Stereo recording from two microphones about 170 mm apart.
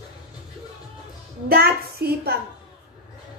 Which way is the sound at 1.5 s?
65° right (ahead or behind).